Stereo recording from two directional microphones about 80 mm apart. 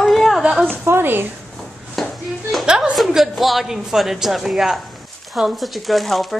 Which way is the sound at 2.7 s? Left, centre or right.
Centre.